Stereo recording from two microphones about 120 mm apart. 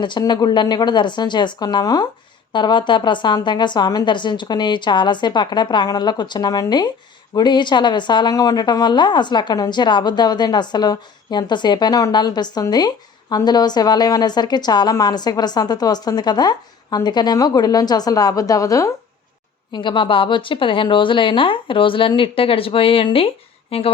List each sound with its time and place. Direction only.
0.0 s a woman's voice: 40° left (ahead or behind)
19.7 s a woman's voice: 40° left (ahead or behind)